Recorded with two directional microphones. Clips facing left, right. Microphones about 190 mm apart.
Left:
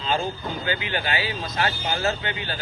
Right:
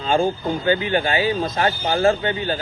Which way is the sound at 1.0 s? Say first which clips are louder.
Right 8 dB; 45° right (ahead or behind).